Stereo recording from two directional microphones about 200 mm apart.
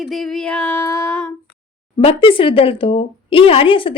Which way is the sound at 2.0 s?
30° left (ahead or behind).